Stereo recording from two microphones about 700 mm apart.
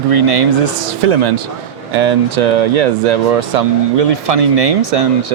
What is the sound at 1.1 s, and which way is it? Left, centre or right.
Speech, right.